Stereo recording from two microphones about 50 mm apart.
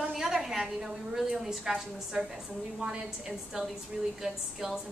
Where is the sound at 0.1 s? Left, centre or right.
Centre.